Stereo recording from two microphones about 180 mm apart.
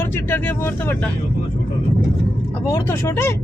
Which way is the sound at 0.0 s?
10° left (ahead or behind).